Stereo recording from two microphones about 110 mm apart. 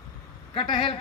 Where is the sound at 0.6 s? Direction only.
55° left (ahead or behind).